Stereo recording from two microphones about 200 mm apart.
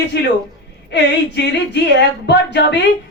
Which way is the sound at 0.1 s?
55° left (ahead or behind).